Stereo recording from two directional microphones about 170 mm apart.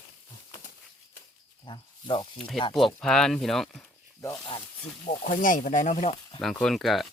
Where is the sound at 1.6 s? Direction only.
30° left (ahead or behind).